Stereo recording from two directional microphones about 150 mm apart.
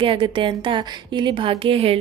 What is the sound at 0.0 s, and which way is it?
A woman's voice, 35° right (ahead or behind).